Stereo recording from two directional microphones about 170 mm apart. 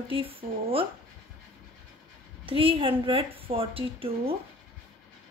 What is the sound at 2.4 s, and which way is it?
Speech, 30° right (ahead or behind).